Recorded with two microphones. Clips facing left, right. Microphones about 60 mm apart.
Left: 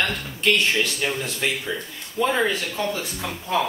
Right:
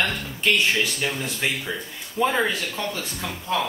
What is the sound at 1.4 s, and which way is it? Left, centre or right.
Speech, centre.